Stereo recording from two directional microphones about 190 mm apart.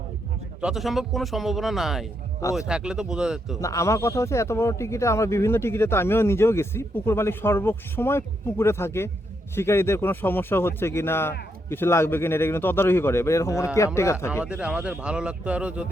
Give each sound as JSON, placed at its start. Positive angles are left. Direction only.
{"t": 0.6, "sound": "a man's voice", "side_deg": 0}
{"t": 3.6, "sound": "a man's voice", "side_deg": 15}
{"t": 14.4, "sound": "a man's voice", "side_deg": -5}